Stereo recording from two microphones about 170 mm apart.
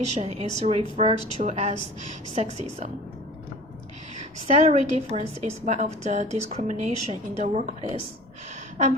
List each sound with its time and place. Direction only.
0.1 s a woman's voice: 40° right (ahead or behind)
4.2 s a woman's voice: 45° right (ahead or behind)